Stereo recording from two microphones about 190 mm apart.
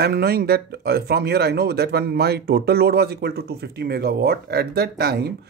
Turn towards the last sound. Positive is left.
turn(degrees=-55)  # may be behind; listen again after turning